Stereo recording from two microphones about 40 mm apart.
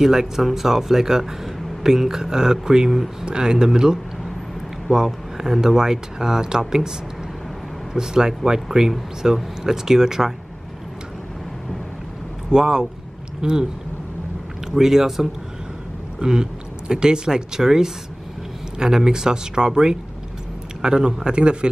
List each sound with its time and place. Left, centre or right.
0.0 s speech: centre
7.9 s speech: centre
12.4 s speech: centre
14.7 s speech: centre
16.2 s a man's voice: centre